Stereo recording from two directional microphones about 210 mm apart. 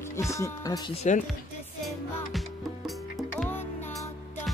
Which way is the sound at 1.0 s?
35° left (ahead or behind).